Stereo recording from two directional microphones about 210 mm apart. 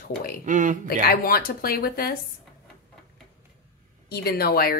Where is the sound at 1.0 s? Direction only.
45° left (ahead or behind).